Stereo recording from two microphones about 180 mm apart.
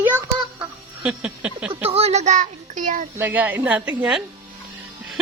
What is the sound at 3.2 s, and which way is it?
A woman's voice, 10° right (ahead or behind).